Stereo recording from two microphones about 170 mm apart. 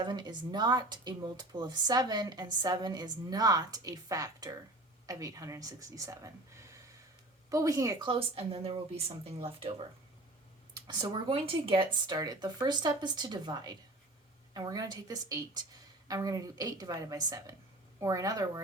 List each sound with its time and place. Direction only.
0.0 s speech: 25° right (ahead or behind)
8.1 s speech: 35° right (ahead or behind)
10.8 s speech: 30° right (ahead or behind)